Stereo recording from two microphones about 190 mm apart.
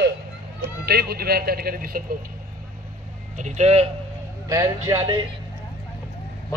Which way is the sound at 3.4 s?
40° right (ahead or behind).